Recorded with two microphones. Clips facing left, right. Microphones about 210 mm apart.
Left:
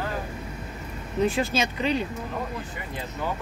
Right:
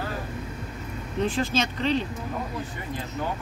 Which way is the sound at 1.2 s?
10° left (ahead or behind).